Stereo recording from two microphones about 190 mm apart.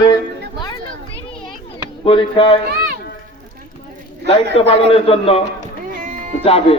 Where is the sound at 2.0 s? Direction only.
25° left (ahead or behind).